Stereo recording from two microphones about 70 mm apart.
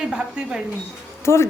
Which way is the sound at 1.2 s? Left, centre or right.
Left.